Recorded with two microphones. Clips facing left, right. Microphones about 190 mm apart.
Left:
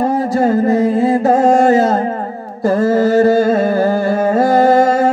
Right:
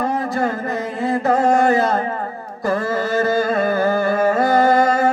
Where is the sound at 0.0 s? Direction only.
35° left (ahead or behind).